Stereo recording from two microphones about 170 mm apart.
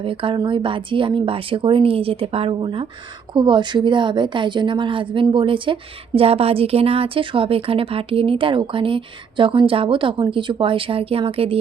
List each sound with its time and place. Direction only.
0.0 s a woman's voice: 30° right (ahead or behind)